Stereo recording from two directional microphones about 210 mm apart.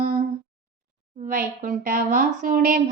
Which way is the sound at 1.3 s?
40° right (ahead or behind).